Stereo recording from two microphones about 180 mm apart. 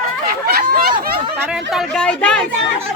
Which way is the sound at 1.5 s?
Centre (ahead or behind).